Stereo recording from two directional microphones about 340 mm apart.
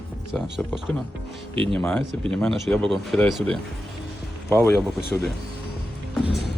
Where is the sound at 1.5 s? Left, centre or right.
Centre.